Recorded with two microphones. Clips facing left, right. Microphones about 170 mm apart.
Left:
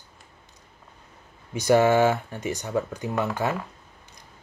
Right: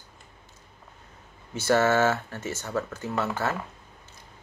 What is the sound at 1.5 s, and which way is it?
Speech, 15° left (ahead or behind).